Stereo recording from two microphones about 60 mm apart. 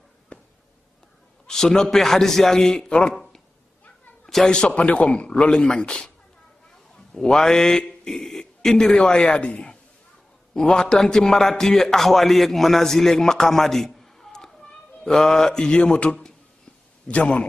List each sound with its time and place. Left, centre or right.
1.5 s speech: centre
4.5 s speech: centre
7.2 s a man's voice: centre